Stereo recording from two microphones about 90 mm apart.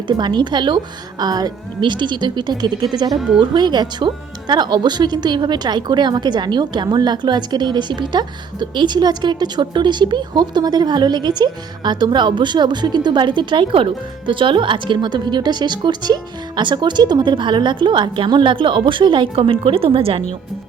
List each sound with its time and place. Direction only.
0.2 s speech: 55° right (ahead or behind)
1.2 s speech: 45° right (ahead or behind); by 20.2 s 90° right